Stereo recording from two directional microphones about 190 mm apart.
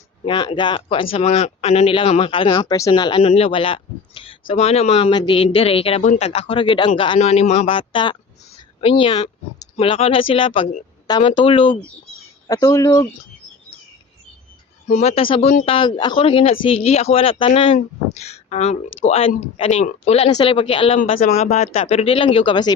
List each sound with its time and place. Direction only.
0.3 s speech: 25° left (ahead or behind)
12.5 s speech: 15° left (ahead or behind)
14.8 s speech: 35° left (ahead or behind)